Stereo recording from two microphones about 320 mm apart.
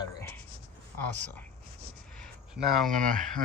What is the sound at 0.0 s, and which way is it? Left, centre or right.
Writing, centre.